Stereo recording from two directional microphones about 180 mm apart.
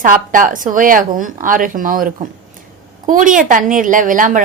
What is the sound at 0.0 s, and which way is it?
A woman's voice, 50° right (ahead or behind).